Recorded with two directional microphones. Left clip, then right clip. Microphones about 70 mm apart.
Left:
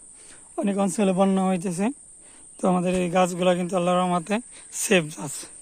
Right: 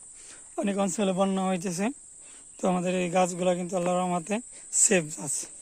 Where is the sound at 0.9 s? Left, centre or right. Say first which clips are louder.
Left 5 dB; left.